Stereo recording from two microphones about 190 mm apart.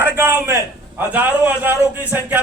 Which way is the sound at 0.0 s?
10° right (ahead or behind).